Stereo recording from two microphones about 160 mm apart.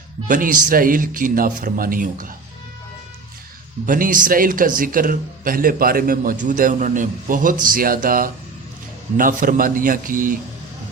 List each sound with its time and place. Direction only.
0.3 s speech: 60° right (ahead or behind)
3.8 s speech: 60° right (ahead or behind)